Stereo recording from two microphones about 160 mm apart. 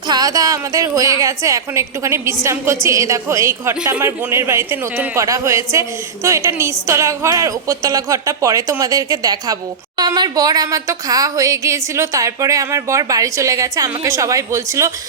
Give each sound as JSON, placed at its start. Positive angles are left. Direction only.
{"t": 0.1, "sound": "speech", "side_deg": -25}